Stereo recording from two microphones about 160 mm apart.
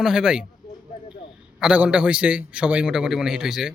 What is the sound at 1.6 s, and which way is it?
A man's voice, 5° right (ahead or behind).